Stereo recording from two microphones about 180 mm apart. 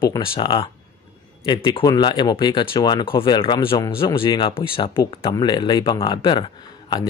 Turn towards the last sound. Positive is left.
turn(degrees=25)  # may be behind; listen again after turning